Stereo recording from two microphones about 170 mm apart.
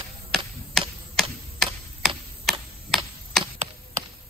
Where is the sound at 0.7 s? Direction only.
Centre (ahead or behind).